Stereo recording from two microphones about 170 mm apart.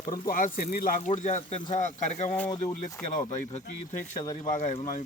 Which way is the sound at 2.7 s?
20° left (ahead or behind).